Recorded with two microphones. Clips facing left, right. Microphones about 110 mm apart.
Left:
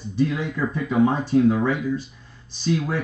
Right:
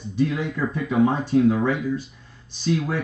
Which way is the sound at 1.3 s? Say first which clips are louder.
Even; 30° left (ahead or behind).